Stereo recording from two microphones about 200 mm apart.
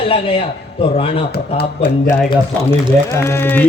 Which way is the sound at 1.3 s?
55° left (ahead or behind).